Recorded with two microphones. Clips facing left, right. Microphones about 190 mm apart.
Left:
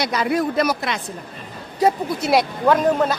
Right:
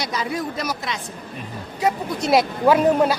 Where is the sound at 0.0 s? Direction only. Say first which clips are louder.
Left 5 dB; 65° left (ahead or behind).